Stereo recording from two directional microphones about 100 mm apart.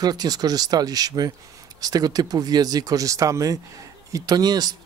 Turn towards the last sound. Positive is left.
turn(degrees=-40)  # may be behind; listen again after turning